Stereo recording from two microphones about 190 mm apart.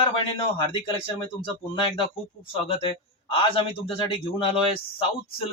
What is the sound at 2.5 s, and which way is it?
A man's voice, 30° left (ahead or behind).